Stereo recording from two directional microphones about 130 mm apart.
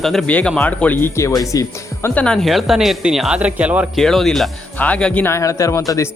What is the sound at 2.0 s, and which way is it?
Speech, 10° left (ahead or behind).